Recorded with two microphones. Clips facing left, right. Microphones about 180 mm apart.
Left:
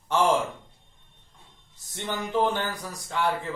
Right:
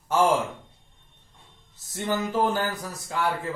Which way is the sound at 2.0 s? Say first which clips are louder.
Right 1 dB; 5° right (ahead or behind).